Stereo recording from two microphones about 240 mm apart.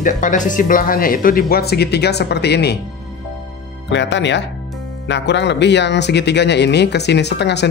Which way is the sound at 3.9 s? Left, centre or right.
Left.